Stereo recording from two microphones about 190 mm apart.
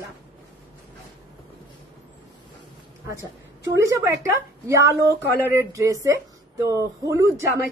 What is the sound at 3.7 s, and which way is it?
A man's voice, 15° right (ahead or behind).